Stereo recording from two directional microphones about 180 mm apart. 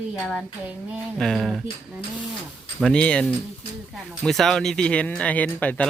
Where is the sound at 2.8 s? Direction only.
5° left (ahead or behind).